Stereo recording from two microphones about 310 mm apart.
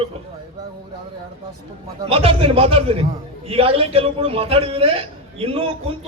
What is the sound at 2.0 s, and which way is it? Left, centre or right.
A man's voice, centre.